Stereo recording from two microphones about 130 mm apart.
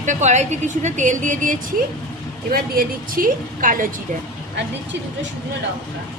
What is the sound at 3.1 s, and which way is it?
Speech, 90° right.